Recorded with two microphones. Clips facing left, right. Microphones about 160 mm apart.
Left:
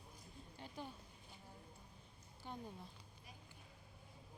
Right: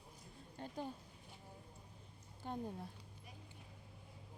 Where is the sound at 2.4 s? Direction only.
45° right (ahead or behind).